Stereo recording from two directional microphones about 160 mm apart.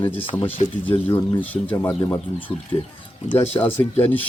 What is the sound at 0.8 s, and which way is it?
Speech, 15° left (ahead or behind).